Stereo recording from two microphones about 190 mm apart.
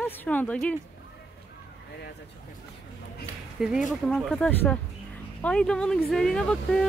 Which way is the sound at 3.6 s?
5° right (ahead or behind).